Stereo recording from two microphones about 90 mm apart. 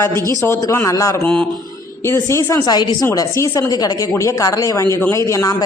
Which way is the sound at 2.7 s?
50° left (ahead or behind).